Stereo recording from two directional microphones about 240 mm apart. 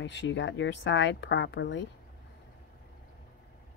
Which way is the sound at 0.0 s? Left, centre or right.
Left.